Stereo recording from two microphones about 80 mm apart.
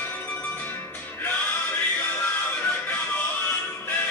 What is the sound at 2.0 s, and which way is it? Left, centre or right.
Music, centre.